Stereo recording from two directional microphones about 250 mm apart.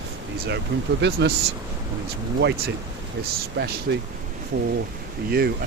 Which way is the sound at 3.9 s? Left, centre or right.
Right.